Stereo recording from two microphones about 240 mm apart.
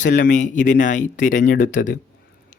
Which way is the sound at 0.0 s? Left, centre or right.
Left.